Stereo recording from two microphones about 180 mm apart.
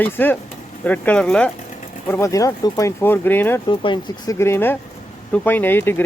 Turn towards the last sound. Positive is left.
turn(degrees=10)  # may be behind; listen again after turning